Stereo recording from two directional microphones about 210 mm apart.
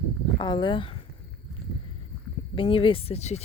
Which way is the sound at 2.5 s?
25° left (ahead or behind).